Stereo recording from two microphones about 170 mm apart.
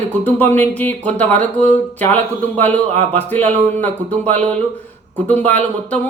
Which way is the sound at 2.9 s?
40° right (ahead or behind).